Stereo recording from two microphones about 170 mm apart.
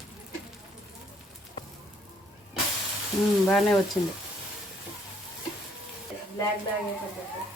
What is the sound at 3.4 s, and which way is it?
Speech, centre (ahead or behind).